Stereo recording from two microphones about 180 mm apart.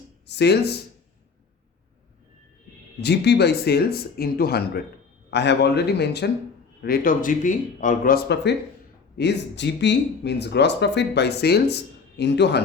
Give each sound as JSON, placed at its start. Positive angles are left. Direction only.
{"t": 0.3, "sound": "speech", "side_deg": 65}
{"t": 3.0, "sound": "speech", "side_deg": 70}
{"t": 6.8, "sound": "speech", "side_deg": 55}